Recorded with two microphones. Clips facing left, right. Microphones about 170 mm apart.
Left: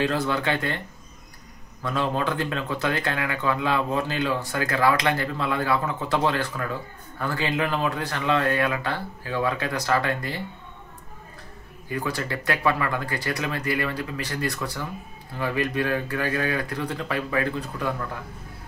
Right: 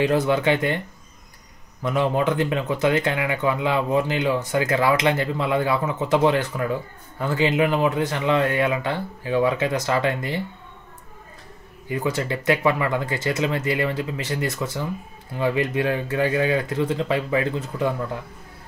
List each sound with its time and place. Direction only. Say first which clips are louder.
0.0 s speech: right 5 dB; 20° right (ahead or behind)
1.8 s speech: right 4 dB; 20° right (ahead or behind)
11.9 s speech: right 4 dB; 20° right (ahead or behind)